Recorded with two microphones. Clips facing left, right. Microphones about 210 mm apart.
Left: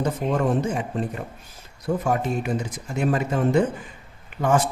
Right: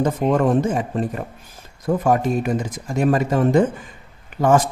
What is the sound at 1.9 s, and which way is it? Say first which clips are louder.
Speech: right 4 dB; 65° right (ahead or behind).